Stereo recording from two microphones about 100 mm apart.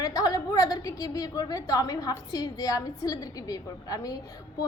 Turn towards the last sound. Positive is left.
turn(degrees=35)  # may be behind; listen again after turning